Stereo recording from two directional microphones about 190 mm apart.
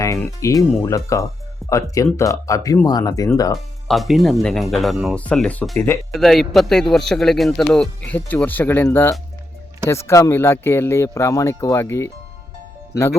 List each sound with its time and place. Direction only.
0.3 s speech: 15° left (ahead or behind)
3.8 s a man's voice: centre (ahead or behind)